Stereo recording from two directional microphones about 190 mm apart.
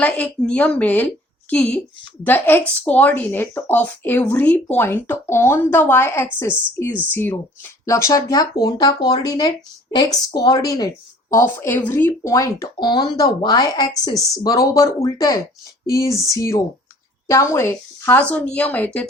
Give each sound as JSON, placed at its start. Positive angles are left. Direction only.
{"t": 0.0, "sound": "a woman's voice", "side_deg": 5}